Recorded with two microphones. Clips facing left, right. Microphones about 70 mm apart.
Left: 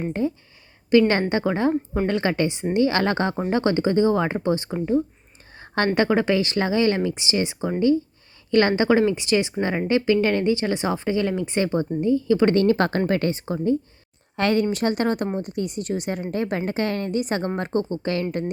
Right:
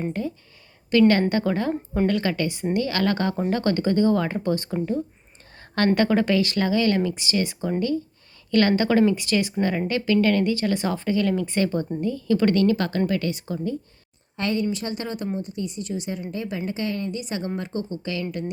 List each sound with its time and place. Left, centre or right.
0.1 s a woman's voice: left
12.5 s a woman's voice: left
14.3 s a woman's voice: left